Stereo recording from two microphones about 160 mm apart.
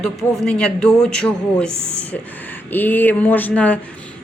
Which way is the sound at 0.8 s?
5° left (ahead or behind).